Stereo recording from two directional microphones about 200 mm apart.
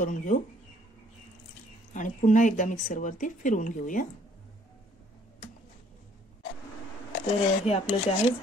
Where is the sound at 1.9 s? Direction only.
40° left (ahead or behind).